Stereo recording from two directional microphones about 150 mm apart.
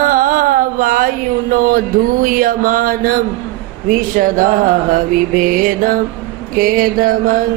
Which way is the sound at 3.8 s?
65° right (ahead or behind).